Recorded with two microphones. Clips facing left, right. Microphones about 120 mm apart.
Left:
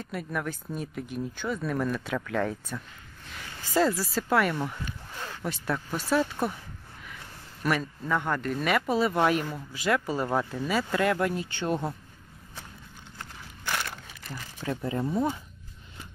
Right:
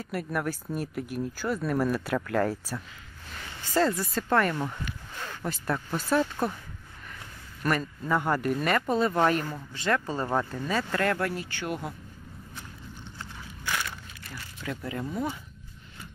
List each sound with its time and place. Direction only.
0.0 s speech: 5° right (ahead or behind)
3.6 s speech: 10° left (ahead or behind)
7.6 s speech: centre (ahead or behind)
8.6 s speech: 5° left (ahead or behind); by 11.9 s 30° left (ahead or behind)
13.7 s crushing: 45° left (ahead or behind)
14.3 s speech: 25° left (ahead or behind)